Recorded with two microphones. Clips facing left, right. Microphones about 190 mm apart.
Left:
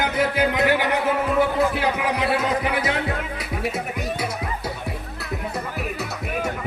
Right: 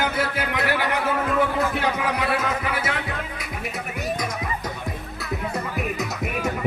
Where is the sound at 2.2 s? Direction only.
25° left (ahead or behind).